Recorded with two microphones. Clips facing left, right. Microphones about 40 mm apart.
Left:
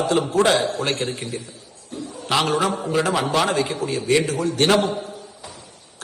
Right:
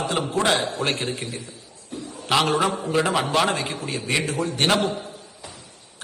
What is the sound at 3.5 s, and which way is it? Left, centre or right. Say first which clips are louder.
A man's voice: left 4 dB; right.